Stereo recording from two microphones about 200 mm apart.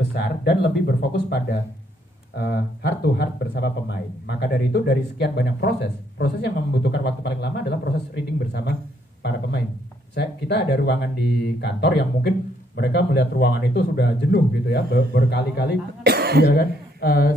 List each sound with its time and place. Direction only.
0.0 s speech: 55° left (ahead or behind)
10.1 s speech: 55° left (ahead or behind)
16.0 s cough: 55° right (ahead or behind)
16.4 s speech: 55° left (ahead or behind)